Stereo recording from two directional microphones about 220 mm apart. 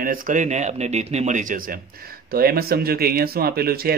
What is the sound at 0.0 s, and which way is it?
Speech, 40° right (ahead or behind).